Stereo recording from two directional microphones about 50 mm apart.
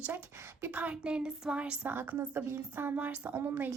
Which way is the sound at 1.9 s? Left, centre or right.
Right.